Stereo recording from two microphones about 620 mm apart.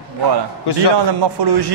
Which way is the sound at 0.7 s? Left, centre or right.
Left.